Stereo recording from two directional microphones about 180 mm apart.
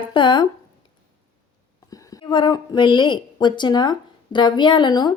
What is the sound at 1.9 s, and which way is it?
A woman's voice, 20° left (ahead or behind).